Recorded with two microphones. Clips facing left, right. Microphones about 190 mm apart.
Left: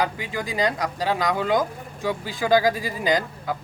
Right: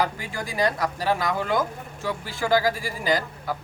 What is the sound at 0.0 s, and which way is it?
Speech, 20° left (ahead or behind).